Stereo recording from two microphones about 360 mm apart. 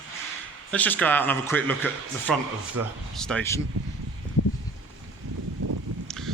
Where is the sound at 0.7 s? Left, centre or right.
Centre.